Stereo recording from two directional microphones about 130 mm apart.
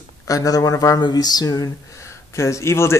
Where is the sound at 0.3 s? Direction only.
25° left (ahead or behind).